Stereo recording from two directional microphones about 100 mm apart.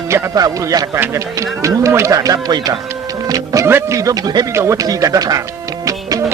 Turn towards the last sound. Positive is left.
turn(degrees=-35)  # may be behind; listen again after turning